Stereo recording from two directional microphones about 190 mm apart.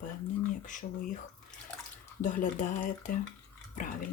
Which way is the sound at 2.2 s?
40° left (ahead or behind).